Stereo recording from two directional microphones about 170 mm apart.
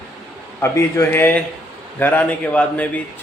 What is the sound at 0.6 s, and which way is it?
A man's voice, 15° left (ahead or behind).